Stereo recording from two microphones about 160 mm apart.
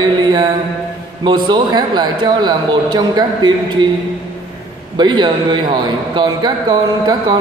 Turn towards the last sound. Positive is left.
turn(degrees=-25)  # may be behind; listen again after turning